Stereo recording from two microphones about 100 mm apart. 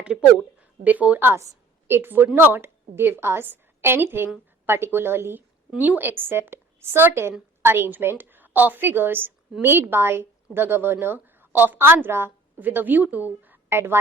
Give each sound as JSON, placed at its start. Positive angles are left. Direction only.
{"t": 0.0, "sound": "a woman's voice", "side_deg": -10}